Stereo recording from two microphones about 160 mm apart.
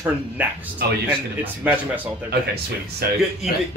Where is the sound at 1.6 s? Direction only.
10° right (ahead or behind).